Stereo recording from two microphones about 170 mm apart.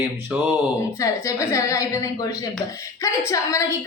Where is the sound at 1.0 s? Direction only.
20° left (ahead or behind).